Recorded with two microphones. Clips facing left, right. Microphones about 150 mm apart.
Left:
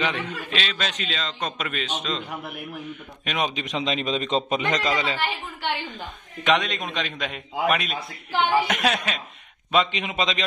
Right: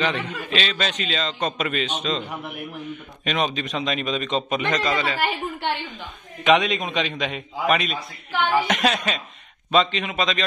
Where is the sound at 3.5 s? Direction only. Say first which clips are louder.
Right 1 dB; 15° left (ahead or behind).